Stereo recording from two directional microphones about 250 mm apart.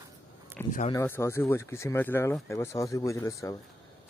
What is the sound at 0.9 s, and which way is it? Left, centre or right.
Speech, centre.